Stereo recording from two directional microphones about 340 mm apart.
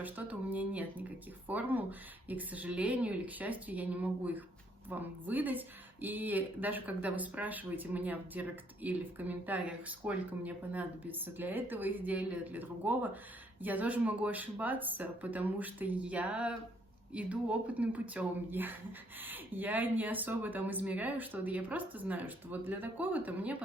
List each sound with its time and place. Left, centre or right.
0.0 s speech: centre